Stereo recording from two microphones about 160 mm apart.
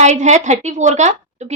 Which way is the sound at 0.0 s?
45° right (ahead or behind).